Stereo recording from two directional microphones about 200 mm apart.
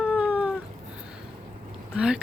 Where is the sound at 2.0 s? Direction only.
5° right (ahead or behind).